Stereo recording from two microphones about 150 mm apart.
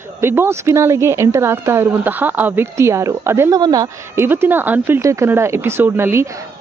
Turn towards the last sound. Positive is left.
turn(degrees=-20)  # may be behind; listen again after turning